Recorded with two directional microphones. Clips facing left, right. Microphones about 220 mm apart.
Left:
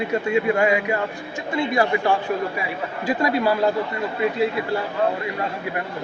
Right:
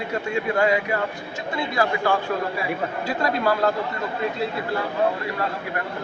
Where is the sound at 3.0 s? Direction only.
15° left (ahead or behind).